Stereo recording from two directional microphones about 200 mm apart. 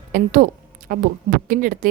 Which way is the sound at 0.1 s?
45° right (ahead or behind).